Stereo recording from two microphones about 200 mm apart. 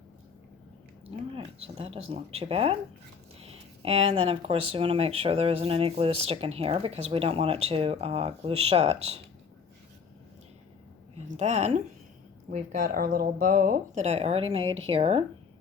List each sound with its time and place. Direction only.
1.6 s speech: 30° right (ahead or behind)
11.3 s speech: 35° right (ahead or behind)